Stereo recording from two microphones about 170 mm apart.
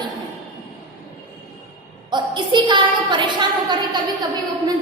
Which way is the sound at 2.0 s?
25° right (ahead or behind).